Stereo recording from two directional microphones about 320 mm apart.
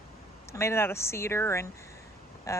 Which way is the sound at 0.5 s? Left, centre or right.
Centre.